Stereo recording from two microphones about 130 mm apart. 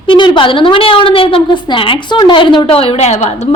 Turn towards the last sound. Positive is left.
turn(degrees=50)  # may be behind; listen again after turning